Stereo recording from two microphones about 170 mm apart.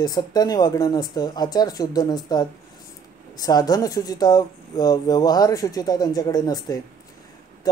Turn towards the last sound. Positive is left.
turn(degrees=20)  # may be behind; listen again after turning